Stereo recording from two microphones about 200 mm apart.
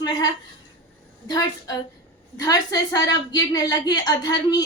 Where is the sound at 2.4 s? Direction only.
20° left (ahead or behind).